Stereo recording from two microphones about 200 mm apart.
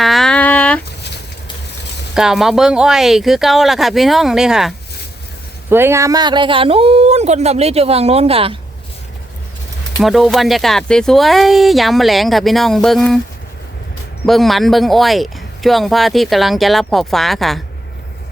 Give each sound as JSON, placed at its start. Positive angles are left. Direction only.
{"t": 0.0, "sound": "a sound", "side_deg": 0}
{"t": 2.1, "sound": "speech", "side_deg": 0}
{"t": 5.7, "sound": "speech", "side_deg": -10}
{"t": 10.0, "sound": "speech", "side_deg": 0}
{"t": 14.3, "sound": "speech", "side_deg": 0}